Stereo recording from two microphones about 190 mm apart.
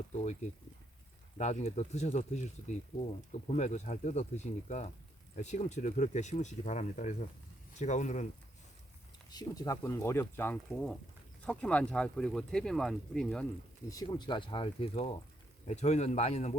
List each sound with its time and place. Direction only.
1.4 s speech: 35° left (ahead or behind)
9.3 s speech: 20° left (ahead or behind)
13.9 s speech: 20° left (ahead or behind); by 16.6 s 35° left (ahead or behind)